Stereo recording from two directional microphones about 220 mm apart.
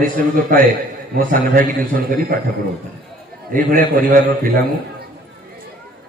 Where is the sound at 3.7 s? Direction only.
40° right (ahead or behind).